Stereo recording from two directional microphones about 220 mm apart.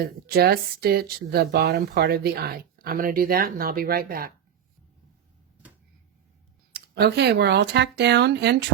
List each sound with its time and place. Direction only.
0.0 s speech: 45° right (ahead or behind)
6.7 s speech: 50° right (ahead or behind)